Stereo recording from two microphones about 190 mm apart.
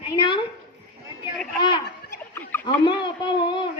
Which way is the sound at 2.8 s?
25° left (ahead or behind).